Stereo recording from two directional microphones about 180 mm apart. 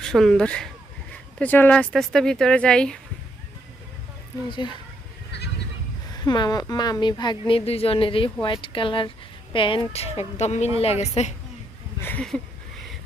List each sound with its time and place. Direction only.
0.0 s speech: centre (ahead or behind)
4.4 s a woman's voice: 25° left (ahead or behind)
6.2 s a woman's voice: 25° left (ahead or behind)
11.9 s speech: 10° left (ahead or behind)